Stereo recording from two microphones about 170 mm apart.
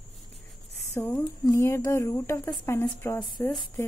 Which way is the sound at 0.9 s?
15° left (ahead or behind).